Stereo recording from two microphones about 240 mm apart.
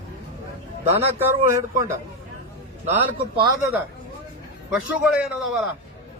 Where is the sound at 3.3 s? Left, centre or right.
Centre.